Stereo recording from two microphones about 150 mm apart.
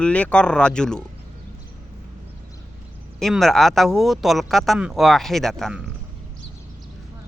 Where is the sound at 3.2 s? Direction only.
Centre (ahead or behind).